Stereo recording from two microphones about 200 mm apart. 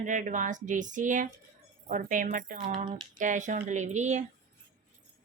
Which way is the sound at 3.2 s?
40° right (ahead or behind).